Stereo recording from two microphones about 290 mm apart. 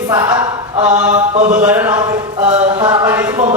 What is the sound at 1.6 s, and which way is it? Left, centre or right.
Speech, centre.